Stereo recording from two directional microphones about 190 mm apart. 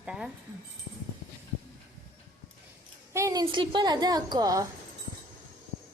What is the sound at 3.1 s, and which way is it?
A woman's voice, 15° right (ahead or behind).